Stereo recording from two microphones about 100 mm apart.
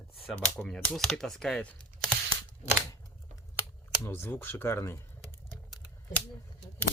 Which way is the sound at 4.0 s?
20° left (ahead or behind).